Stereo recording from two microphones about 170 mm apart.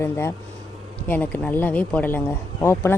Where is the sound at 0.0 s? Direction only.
15° left (ahead or behind).